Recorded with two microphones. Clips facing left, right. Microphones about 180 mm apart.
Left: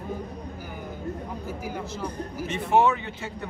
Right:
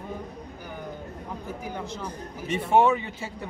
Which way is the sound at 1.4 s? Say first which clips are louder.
Left 1 dB; 5° left (ahead or behind).